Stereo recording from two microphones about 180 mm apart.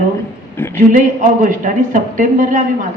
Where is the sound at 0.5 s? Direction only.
10° left (ahead or behind).